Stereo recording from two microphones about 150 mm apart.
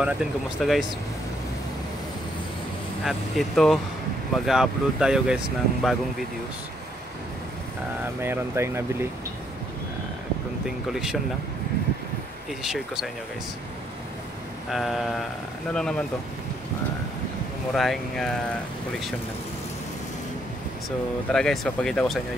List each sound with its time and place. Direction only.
0.0 s speech: 5° right (ahead or behind)
3.1 s speech: centre (ahead or behind)
8.2 s speech: 15° right (ahead or behind)
10.9 s speech: 5° right (ahead or behind)
12.6 s speech: centre (ahead or behind)
14.7 s speech: centre (ahead or behind)
17.7 s speech: centre (ahead or behind)
21.3 s speech: 5° left (ahead or behind)